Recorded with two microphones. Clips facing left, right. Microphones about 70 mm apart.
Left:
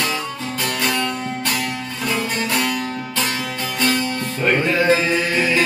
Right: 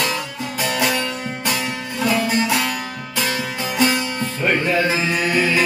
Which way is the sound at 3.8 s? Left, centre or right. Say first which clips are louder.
Right 1 dB; centre.